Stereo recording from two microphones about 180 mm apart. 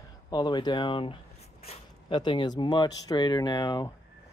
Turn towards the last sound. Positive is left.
turn(degrees=25)  # may be behind; listen again after turning